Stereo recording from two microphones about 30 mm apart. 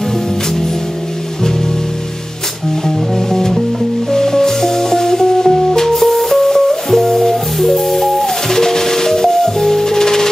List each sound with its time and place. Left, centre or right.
3.3 s music: centre